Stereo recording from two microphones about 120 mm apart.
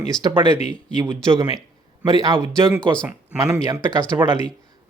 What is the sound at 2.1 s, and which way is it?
Speech, 35° right (ahead or behind).